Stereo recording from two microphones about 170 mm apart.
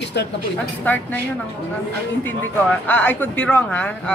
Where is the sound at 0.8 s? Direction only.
10° left (ahead or behind).